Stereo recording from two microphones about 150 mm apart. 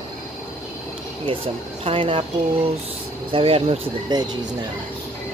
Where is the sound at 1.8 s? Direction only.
35° right (ahead or behind).